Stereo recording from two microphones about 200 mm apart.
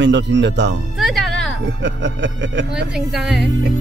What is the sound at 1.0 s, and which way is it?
Music, centre (ahead or behind).